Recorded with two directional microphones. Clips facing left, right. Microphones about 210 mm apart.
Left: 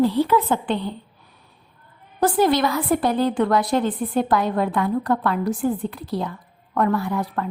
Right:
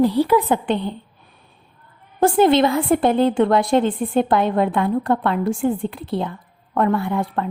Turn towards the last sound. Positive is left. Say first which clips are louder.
# right 2 dB
turn(degrees=-25)  # may be behind; listen again after turning